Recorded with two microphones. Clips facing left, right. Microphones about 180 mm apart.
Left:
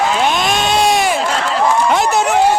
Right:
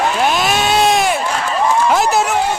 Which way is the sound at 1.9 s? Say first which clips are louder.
Even; centre (ahead or behind).